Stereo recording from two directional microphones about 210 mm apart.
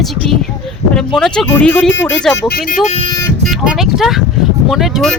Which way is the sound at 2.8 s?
25° left (ahead or behind).